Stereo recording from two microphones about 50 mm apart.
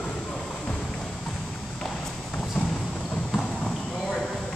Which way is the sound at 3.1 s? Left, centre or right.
Centre.